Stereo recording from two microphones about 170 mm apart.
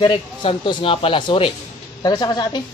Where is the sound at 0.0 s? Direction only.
30° left (ahead or behind).